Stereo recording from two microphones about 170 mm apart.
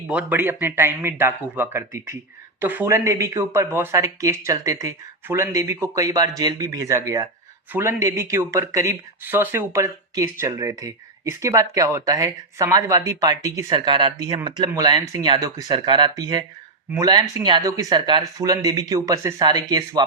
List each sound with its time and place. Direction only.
0.1 s speech: 10° right (ahead or behind)